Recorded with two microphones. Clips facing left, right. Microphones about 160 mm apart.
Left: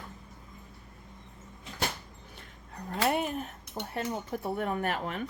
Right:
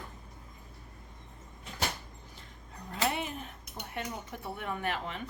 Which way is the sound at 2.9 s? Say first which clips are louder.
Left 4 dB; 50° left (ahead or behind).